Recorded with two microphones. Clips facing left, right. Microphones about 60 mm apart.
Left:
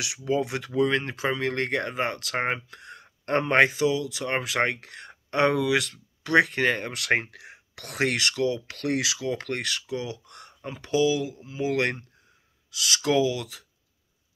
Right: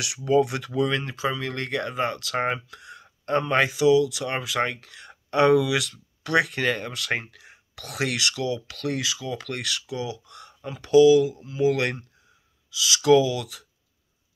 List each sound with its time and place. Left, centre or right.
0.3 s speech: left
1.1 s speech: left
3.3 s speech: left
4.4 s speech: left
5.3 s speech: left
6.9 s speech: left
7.8 s speech: left
8.8 s speech: left
9.5 s speech: left
10.7 s speech: left
12.7 s speech: left
13.0 s speech: left